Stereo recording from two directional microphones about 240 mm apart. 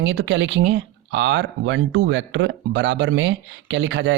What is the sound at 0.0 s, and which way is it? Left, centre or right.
Speech, right.